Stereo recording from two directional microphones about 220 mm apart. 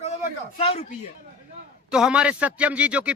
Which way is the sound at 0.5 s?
25° left (ahead or behind).